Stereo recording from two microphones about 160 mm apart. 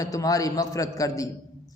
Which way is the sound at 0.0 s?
20° left (ahead or behind).